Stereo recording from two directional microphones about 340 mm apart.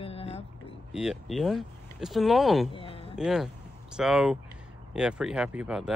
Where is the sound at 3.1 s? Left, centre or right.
Centre.